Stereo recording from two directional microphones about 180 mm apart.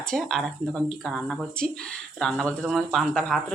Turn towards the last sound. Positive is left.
turn(degrees=0)  # may be behind; listen again after turning